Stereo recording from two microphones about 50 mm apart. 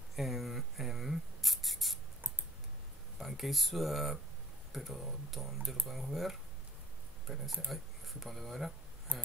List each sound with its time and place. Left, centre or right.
0.1 s rub: centre
3.2 s speech: centre
9.1 s speech: right